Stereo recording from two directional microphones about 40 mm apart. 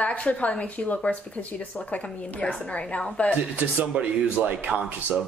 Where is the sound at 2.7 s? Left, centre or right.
Left.